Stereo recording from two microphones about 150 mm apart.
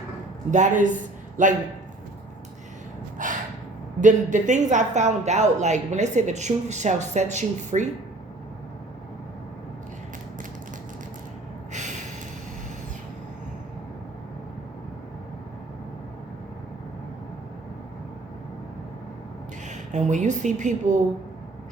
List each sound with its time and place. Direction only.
0.5 s speech: 55° right (ahead or behind)
3.2 s gasp: 60° right (ahead or behind)
4.0 s speech: 55° right (ahead or behind)
19.6 s speech: 50° right (ahead or behind)